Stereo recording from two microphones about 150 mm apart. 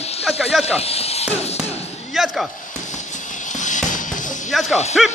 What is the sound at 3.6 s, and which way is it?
Music, 55° left (ahead or behind).